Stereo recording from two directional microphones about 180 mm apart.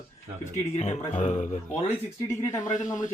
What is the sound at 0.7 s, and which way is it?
Speech, 40° left (ahead or behind).